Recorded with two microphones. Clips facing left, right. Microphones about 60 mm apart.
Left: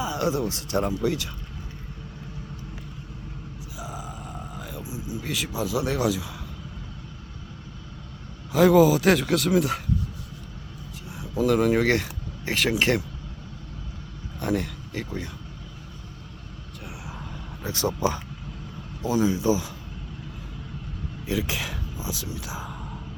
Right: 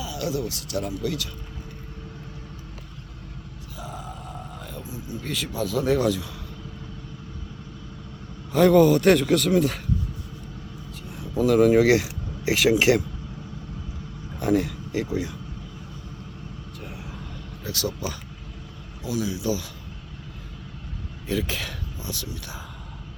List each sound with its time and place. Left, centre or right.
0.0 s speech: left
3.8 s grunt: centre
5.2 s speech: centre
8.5 s speech: centre
11.2 s speech: centre
14.3 s a sound: centre
17.6 s speech: left
21.2 s a sound: centre